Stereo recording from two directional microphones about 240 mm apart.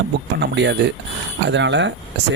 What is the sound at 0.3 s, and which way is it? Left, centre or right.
Speech, right.